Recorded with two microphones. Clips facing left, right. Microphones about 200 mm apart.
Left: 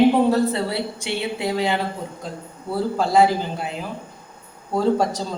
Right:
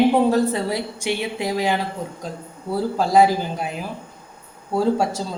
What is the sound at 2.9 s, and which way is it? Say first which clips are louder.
Speech: right 1 dB; 15° right (ahead or behind).